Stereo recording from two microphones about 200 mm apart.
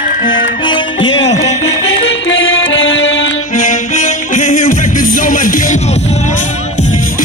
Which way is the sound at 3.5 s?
40° left (ahead or behind).